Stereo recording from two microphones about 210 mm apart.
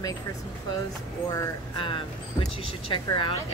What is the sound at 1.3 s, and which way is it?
Speech, 25° left (ahead or behind).